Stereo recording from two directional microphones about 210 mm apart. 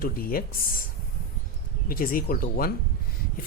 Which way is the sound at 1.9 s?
45° left (ahead or behind).